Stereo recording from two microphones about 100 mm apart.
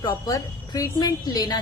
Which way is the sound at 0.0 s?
40° left (ahead or behind).